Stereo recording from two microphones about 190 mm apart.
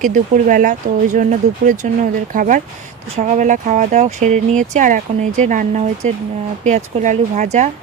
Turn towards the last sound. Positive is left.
turn(degrees=-40)  # may be behind; listen again after turning